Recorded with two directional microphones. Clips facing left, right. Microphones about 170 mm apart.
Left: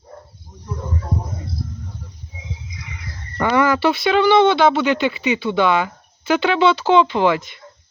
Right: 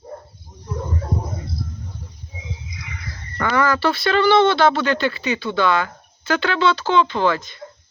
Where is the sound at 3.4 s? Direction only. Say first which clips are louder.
Left 3 dB; 25° left (ahead or behind).